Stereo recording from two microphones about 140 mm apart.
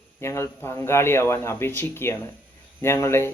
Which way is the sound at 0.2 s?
20° left (ahead or behind).